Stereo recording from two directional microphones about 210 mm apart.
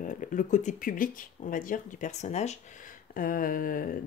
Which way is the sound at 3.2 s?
40° left (ahead or behind).